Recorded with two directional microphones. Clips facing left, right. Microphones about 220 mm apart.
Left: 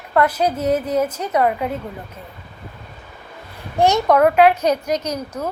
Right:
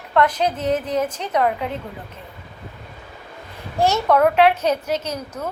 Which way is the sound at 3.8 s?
15° left (ahead or behind).